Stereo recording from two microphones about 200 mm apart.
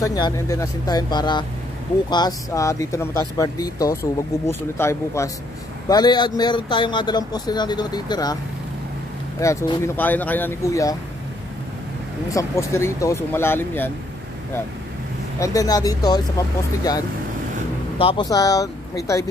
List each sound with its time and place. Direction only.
0.0 s a man's voice: 20° left (ahead or behind)
9.4 s speech: 15° left (ahead or behind)
12.3 s speech: 15° left (ahead or behind)
15.3 s a man's voice: 15° left (ahead or behind)